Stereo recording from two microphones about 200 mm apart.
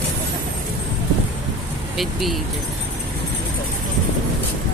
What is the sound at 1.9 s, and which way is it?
Speech, centre (ahead or behind).